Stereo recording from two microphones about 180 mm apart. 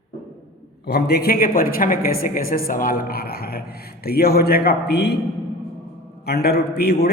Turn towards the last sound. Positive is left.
turn(degrees=60)  # may be behind; listen again after turning